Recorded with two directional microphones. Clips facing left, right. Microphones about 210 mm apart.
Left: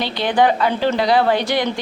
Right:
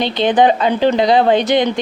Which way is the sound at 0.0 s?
20° right (ahead or behind).